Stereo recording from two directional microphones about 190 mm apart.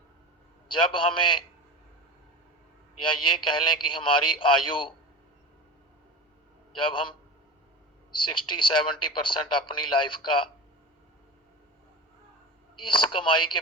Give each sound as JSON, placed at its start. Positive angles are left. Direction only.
{"t": 0.7, "sound": "speech", "side_deg": 25}
{"t": 3.0, "sound": "speech", "side_deg": 25}
{"t": 8.1, "sound": "speech", "side_deg": 25}
{"t": 12.8, "sound": "speech", "side_deg": 25}